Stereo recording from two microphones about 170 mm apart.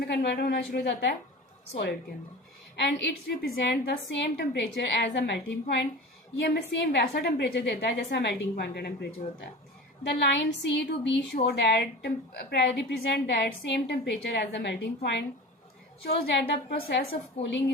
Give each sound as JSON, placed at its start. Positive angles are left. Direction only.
{"t": 0.0, "sound": "a woman's voice", "side_deg": 75}
{"t": 2.7, "sound": "a woman's voice", "side_deg": 90}
{"t": 6.4, "sound": "a woman's voice", "side_deg": 70}
{"t": 10.0, "sound": "a woman's voice", "side_deg": 90}
{"t": 11.3, "sound": "a woman's voice", "side_deg": 70}
{"t": 16.0, "sound": "a woman's voice", "side_deg": 75}